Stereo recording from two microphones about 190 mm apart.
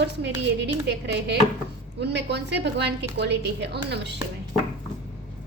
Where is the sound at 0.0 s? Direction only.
65° right (ahead or behind).